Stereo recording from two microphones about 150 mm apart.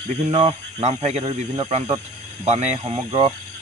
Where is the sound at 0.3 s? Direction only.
45° right (ahead or behind).